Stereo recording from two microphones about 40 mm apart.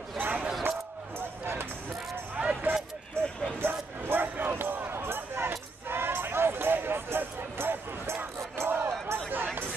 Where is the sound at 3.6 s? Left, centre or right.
Right.